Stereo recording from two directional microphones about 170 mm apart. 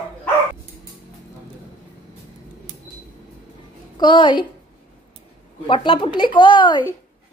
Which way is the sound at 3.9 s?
25° left (ahead or behind).